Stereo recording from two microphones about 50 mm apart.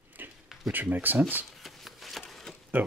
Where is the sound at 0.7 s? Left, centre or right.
Right.